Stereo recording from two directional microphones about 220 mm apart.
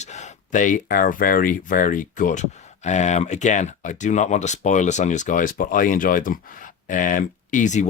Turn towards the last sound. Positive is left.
turn(degrees=35)  # may be behind; listen again after turning